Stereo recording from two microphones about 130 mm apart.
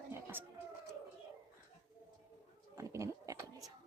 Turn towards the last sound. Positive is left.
turn(degrees=-25)  # may be behind; listen again after turning